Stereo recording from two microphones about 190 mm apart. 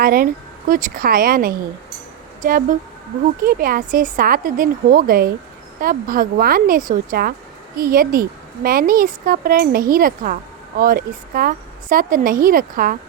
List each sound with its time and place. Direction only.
0.0 s speech: 50° right (ahead or behind)